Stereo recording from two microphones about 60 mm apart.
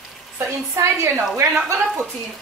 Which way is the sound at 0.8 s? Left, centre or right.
Right.